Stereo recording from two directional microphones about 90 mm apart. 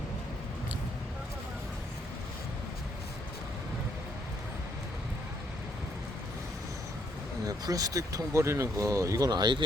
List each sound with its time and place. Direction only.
7.4 s speech: 40° right (ahead or behind)